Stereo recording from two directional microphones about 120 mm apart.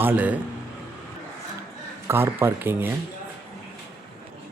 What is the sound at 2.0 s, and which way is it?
Speech, 20° right (ahead or behind).